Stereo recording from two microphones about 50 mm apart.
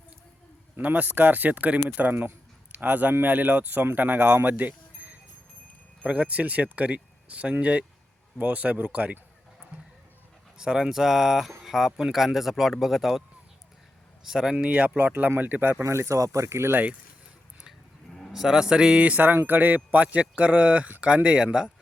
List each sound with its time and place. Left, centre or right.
0.8 s speech: right
4.4 s a sound: right
6.0 s speech: right
10.6 s speech: centre
14.3 s speech: centre; by 15.8 s right
15.8 s speech: right
18.3 s speech: centre